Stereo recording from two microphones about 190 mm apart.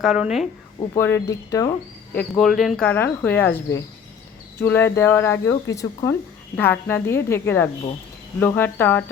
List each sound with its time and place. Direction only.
0.0 s speech: centre (ahead or behind)
0.9 s speech: 15° left (ahead or behind)
2.1 s speech: 5° left (ahead or behind)